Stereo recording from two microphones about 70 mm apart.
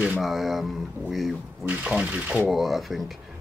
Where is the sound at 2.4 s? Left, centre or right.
Centre.